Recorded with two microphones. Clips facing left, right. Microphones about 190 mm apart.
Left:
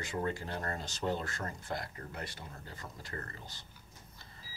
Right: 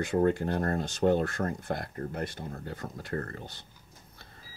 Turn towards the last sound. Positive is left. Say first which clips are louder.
# right 9 dB
turn(degrees=-60)  # may be behind; listen again after turning